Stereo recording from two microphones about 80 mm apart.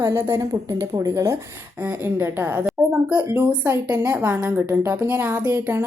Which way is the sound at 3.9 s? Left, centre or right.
Right.